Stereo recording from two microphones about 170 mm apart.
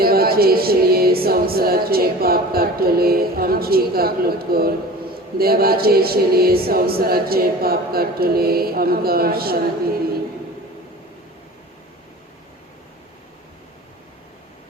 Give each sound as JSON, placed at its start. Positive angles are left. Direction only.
{"t": 0.0, "sound": "music", "side_deg": -60}